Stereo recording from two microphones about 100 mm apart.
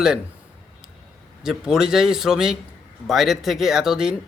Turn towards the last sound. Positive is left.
turn(degrees=-5)  # may be behind; listen again after turning